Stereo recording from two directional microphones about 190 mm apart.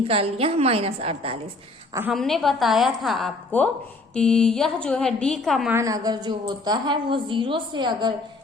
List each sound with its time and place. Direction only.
0.1 s a woman's voice: 30° right (ahead or behind)
2.0 s a woman's voice: centre (ahead or behind)
5.7 s a woman's voice: 20° right (ahead or behind)